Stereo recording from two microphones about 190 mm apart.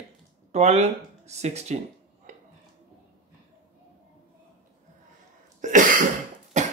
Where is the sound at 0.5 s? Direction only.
35° right (ahead or behind).